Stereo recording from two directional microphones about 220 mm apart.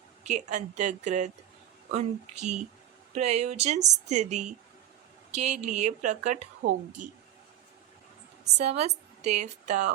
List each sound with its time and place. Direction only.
0.3 s a woman's voice: 30° right (ahead or behind)
8.5 s a woman's voice: 30° right (ahead or behind)